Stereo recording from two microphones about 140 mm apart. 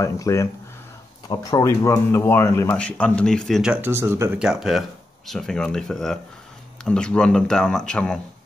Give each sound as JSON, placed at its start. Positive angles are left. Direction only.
{"t": 0.0, "sound": "speech", "side_deg": 20}
{"t": 3.7, "sound": "speech", "side_deg": -15}
{"t": 4.4, "sound": "speech", "side_deg": 0}